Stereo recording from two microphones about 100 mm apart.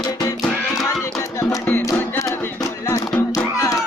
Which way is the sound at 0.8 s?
35° left (ahead or behind).